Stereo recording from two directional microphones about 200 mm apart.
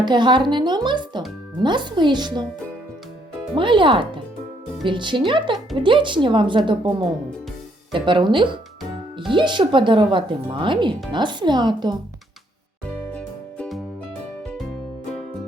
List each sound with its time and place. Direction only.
0.0 s speech: 20° right (ahead or behind)
3.5 s speech: 25° right (ahead or behind)
7.9 s speech: 25° right (ahead or behind)
13.1 s music: 5° left (ahead or behind)